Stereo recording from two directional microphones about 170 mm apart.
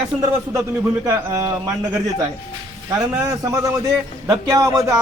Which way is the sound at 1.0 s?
20° right (ahead or behind).